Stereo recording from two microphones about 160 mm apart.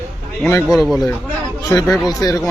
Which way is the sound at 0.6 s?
Centre (ahead or behind).